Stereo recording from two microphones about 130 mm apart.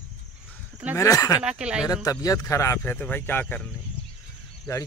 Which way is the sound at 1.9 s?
30° left (ahead or behind).